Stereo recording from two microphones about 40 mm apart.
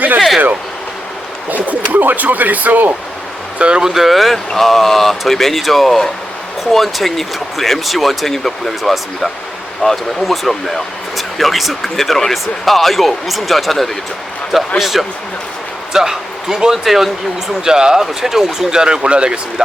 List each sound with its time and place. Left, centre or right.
1.5 s speech: right
3.6 s speech: right
3.8 s speech: centre
16.8 s speech: centre
17.7 s speech: centre